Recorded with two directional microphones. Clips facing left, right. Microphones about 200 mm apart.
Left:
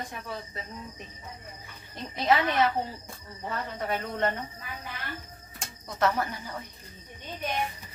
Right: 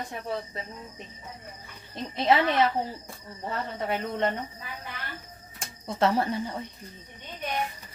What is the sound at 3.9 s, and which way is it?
Speech, 20° right (ahead or behind).